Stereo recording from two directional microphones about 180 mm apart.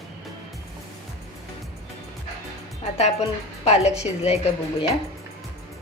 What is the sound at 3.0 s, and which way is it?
Speech, 35° left (ahead or behind).